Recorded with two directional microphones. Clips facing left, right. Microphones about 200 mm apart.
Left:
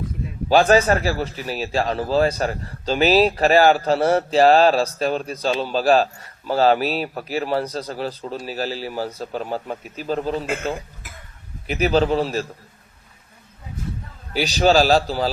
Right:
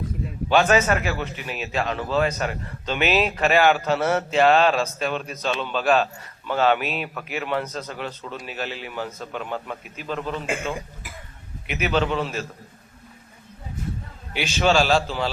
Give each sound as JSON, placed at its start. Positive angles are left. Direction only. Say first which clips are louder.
{"t": 0.4, "sound": "a man's voice", "louder": "left 4 dB", "side_deg": 35}
{"t": 11.6, "sound": "a man's voice", "louder": "left 5 dB", "side_deg": 35}
{"t": 14.3, "sound": "a man's voice", "louder": "left 4 dB", "side_deg": 40}